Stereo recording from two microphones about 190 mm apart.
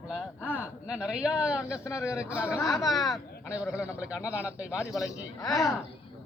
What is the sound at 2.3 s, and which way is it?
Speech, 5° right (ahead or behind).